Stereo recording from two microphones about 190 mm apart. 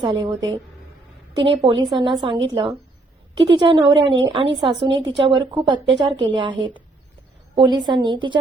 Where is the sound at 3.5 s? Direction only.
25° right (ahead or behind).